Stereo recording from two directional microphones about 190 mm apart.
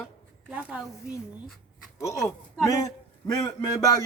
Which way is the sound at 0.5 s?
5° right (ahead or behind).